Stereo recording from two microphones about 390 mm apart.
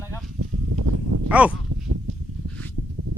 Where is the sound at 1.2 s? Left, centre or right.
Centre.